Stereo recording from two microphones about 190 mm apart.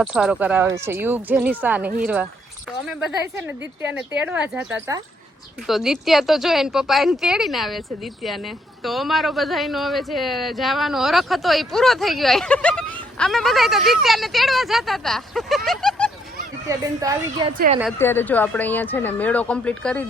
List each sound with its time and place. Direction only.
0.0 s speech: 5° right (ahead or behind)
16.6 s speech: 20° right (ahead or behind)
17.9 s speech: 10° left (ahead or behind)